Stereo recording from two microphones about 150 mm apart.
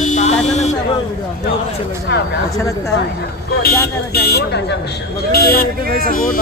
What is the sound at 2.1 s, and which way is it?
Speech, 90° left.